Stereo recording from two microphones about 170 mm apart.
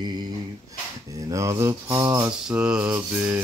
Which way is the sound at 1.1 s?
20° right (ahead or behind).